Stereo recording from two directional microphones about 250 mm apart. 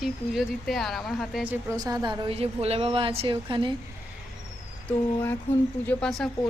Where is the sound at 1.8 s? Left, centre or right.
Centre.